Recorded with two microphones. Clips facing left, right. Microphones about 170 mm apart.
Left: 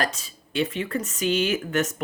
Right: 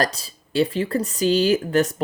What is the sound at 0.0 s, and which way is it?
Speech, 35° right (ahead or behind).